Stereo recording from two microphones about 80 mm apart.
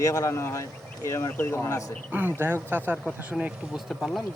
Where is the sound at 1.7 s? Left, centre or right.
Left.